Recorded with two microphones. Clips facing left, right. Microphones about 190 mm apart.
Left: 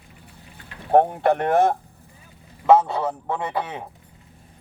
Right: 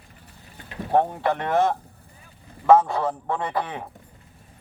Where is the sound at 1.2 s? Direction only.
50° left (ahead or behind).